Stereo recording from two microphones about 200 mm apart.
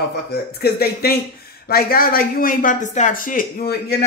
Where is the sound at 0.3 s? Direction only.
50° left (ahead or behind).